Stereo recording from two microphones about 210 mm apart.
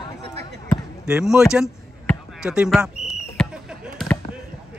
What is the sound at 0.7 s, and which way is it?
Basketball bounce, 5° right (ahead or behind).